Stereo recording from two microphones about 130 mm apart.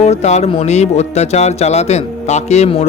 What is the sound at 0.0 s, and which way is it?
Music, 60° left (ahead or behind).